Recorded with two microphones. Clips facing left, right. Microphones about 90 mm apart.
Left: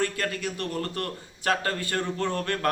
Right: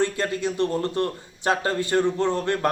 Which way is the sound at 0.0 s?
25° right (ahead or behind).